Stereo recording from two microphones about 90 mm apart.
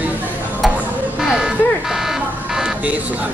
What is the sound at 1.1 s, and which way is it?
Buzzer, 5° right (ahead or behind).